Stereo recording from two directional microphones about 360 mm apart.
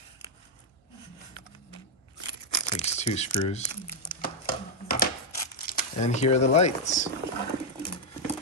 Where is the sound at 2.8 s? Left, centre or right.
Centre.